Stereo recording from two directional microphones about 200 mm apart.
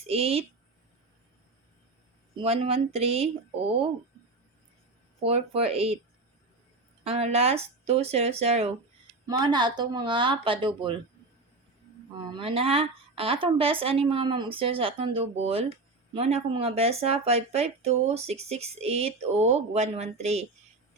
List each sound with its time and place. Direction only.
0.1 s a woman's voice: 30° right (ahead or behind)
2.3 s a woman's voice: 30° right (ahead or behind)
5.2 s a woman's voice: 30° right (ahead or behind)
7.0 s a woman's voice: 30° right (ahead or behind)
12.2 s a woman's voice: 25° right (ahead or behind)